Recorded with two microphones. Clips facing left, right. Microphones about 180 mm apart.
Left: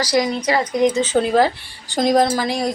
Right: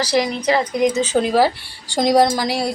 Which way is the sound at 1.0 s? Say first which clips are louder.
Even; 10° right (ahead or behind).